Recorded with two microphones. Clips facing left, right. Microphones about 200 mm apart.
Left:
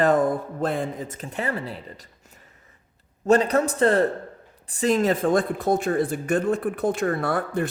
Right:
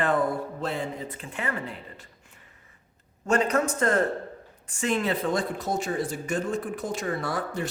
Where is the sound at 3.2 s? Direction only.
35° left (ahead or behind).